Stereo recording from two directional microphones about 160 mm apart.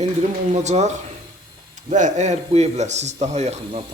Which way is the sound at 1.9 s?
50° right (ahead or behind).